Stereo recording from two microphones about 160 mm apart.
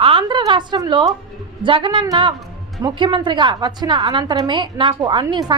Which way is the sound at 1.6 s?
30° right (ahead or behind).